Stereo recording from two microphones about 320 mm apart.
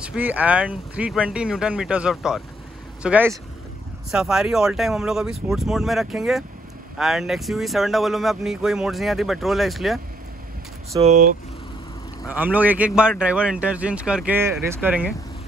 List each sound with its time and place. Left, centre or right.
0.0 s speech: centre
10.9 s speech: right
12.3 s speech: centre